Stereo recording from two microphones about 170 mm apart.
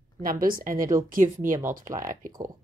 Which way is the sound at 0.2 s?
55° right (ahead or behind).